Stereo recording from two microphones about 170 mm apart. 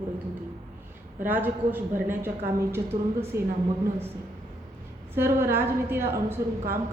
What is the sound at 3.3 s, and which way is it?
Speech, 15° right (ahead or behind).